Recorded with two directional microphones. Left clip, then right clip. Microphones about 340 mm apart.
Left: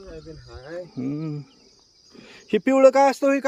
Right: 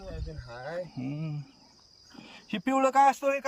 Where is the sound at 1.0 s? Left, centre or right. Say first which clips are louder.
Left 9 dB; centre.